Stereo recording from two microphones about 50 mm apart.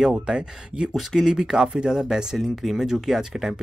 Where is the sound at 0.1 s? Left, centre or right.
Centre.